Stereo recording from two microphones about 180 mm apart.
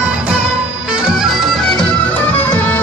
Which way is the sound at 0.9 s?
5° right (ahead or behind).